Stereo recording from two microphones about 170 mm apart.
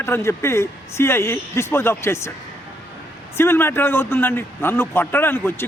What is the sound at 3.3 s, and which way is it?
A man's voice, 15° left (ahead or behind).